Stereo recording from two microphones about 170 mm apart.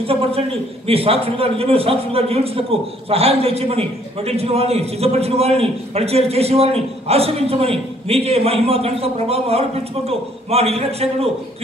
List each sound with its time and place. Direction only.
0.0 s a man's voice: 35° right (ahead or behind)